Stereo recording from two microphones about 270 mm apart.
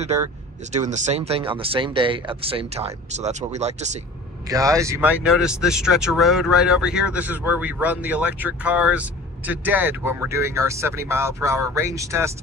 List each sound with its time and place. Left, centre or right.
0.7 s speech: right
4.5 s speech: centre